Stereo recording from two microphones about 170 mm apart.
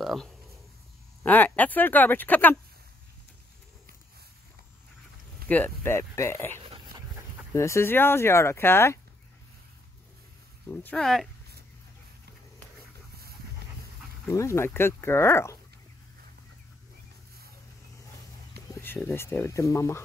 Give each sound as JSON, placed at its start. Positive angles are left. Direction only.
{"t": 0.0, "sound": "a sound", "side_deg": 0}
{"t": 1.2, "sound": "speech", "side_deg": 10}
{"t": 5.5, "sound": "speech", "side_deg": 10}
{"t": 10.7, "sound": "speech", "side_deg": 10}
{"t": 14.2, "sound": "speech", "side_deg": 15}
{"t": 18.7, "sound": "speech", "side_deg": 10}